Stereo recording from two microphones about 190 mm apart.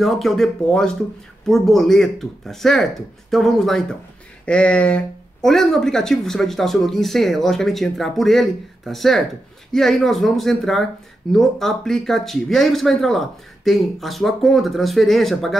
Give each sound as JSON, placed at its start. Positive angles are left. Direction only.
{"t": 0.0, "sound": "speech", "side_deg": 0}